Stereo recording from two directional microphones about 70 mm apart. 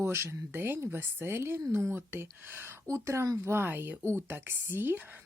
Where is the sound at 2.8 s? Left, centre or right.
Right.